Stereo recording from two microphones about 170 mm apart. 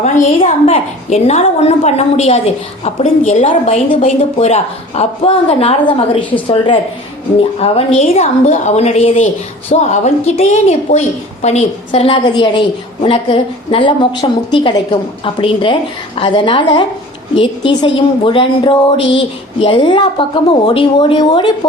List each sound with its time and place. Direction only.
0.0 s a woman's voice: 40° left (ahead or behind)
7.3 s a woman's voice: 35° left (ahead or behind)